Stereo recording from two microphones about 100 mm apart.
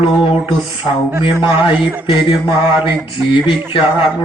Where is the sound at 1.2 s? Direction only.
55° left (ahead or behind).